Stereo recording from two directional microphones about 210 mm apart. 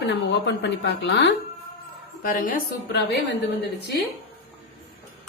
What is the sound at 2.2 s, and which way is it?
A woman's voice, 40° left (ahead or behind).